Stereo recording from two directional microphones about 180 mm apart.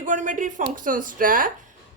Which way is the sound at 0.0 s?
45° right (ahead or behind).